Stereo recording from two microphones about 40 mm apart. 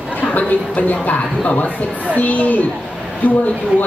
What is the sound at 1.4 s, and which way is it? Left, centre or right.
A man's voice, left.